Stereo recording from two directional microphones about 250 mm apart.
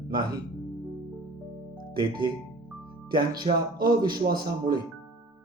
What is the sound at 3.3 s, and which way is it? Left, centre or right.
A man's voice, centre.